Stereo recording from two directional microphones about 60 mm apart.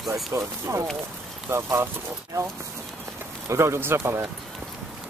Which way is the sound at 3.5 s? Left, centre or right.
Right.